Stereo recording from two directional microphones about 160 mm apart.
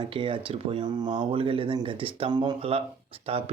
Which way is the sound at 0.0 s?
30° right (ahead or behind).